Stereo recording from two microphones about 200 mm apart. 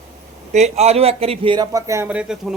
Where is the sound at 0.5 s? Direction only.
35° right (ahead or behind).